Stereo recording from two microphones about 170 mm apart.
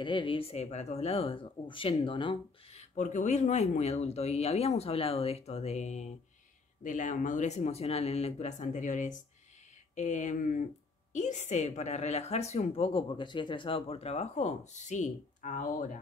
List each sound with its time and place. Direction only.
0.0 s a woman's voice: 30° left (ahead or behind)
2.8 s a woman's voice: 45° left (ahead or behind)